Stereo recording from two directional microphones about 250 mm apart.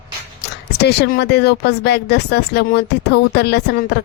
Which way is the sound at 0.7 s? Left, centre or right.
Left.